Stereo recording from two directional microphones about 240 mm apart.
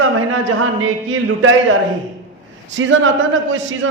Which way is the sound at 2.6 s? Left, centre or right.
Right.